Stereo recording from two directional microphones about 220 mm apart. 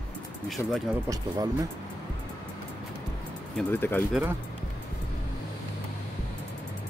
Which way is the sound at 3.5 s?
10° left (ahead or behind).